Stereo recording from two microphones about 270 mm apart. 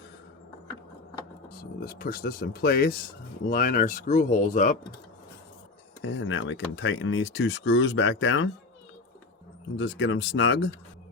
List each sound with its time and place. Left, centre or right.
1.8 s speech: left
6.0 s speech: left
9.7 s speech: left